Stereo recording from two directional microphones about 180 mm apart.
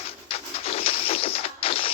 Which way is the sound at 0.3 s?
35° left (ahead or behind).